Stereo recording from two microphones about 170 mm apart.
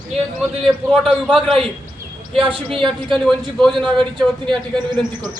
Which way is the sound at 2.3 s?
30° right (ahead or behind).